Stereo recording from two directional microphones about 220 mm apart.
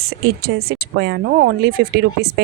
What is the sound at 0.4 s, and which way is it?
Speech, 45° right (ahead or behind).